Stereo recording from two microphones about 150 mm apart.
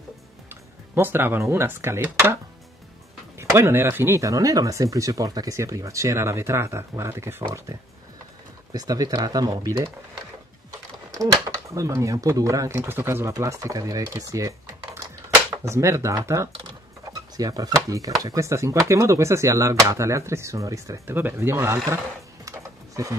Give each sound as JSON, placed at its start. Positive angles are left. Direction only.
{"t": 0.9, "sound": "speech", "side_deg": -15}
{"t": 3.3, "sound": "speech", "side_deg": -20}
{"t": 8.7, "sound": "speech", "side_deg": -25}
{"t": 11.7, "sound": "speech", "side_deg": -20}
{"t": 15.6, "sound": "speech", "side_deg": -20}